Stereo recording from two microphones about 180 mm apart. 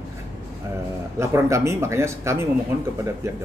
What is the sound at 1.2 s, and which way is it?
Speech, 15° right (ahead or behind).